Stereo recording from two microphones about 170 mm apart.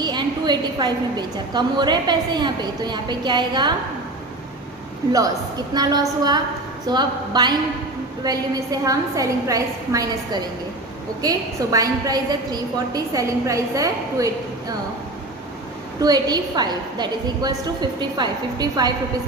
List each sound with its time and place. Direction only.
0.0 s a woman's voice: 25° right (ahead or behind)
5.1 s a woman's voice: 20° right (ahead or behind)
16.0 s a woman's voice: 20° right (ahead or behind)